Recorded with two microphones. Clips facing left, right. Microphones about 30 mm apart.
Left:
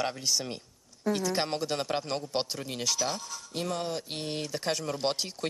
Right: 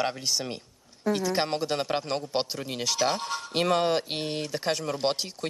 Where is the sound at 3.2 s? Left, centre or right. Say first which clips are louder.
Right 8 dB; right.